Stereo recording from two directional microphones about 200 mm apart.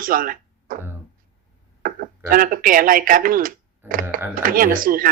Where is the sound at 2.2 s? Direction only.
45° right (ahead or behind).